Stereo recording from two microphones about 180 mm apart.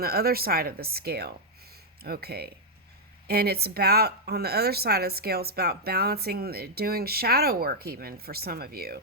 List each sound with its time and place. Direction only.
0.0 s a woman's voice: 55° right (ahead or behind)